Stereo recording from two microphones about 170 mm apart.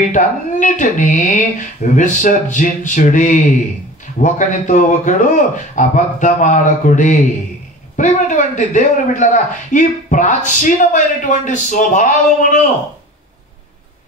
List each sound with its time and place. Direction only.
0.1 s a man's voice: 50° left (ahead or behind)